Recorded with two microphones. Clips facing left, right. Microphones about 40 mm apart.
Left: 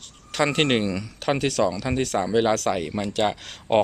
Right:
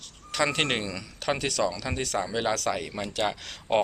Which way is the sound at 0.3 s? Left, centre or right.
Centre.